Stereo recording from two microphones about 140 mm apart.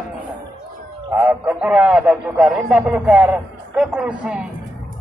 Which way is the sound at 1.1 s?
5° right (ahead or behind).